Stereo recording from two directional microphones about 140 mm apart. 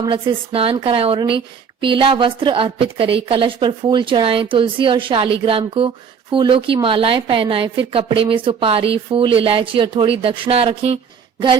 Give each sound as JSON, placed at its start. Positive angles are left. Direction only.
{"t": 0.0, "sound": "a woman's voice", "side_deg": -35}